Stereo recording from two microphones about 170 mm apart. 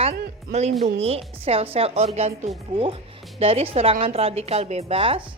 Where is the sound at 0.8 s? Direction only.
35° right (ahead or behind).